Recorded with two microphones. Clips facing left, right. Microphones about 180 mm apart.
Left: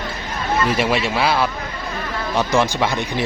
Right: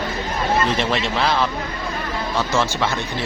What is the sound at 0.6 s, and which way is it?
Speech, 10° left (ahead or behind).